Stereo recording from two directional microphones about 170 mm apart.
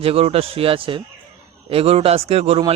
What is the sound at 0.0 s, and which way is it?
Speech, 35° right (ahead or behind).